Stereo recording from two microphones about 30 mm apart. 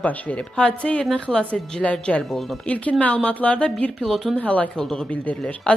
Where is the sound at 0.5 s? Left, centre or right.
Left.